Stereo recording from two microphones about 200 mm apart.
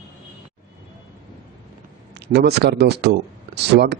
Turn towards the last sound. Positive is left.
turn(degrees=-55)  # may be behind; listen again after turning